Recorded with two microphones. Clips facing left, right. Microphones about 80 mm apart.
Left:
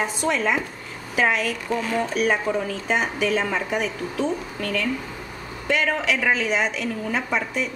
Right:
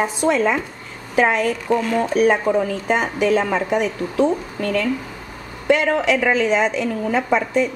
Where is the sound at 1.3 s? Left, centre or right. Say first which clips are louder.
Right 4 dB; right.